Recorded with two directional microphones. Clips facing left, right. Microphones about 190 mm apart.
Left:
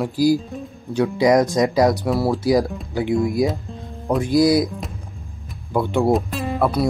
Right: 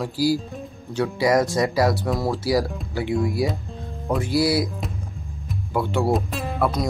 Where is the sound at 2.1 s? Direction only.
5° left (ahead or behind).